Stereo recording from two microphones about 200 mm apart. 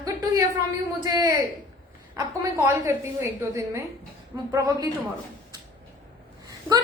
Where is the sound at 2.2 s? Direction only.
15° right (ahead or behind).